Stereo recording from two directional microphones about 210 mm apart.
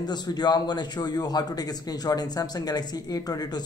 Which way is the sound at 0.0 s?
20° left (ahead or behind).